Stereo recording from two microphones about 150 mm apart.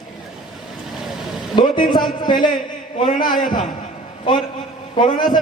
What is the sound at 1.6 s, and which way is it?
A man's voice, 30° left (ahead or behind).